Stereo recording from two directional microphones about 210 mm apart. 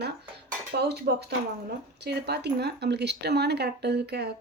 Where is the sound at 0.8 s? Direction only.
50° right (ahead or behind).